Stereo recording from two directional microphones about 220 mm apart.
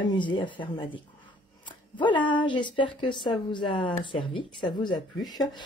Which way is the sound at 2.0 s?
20° left (ahead or behind).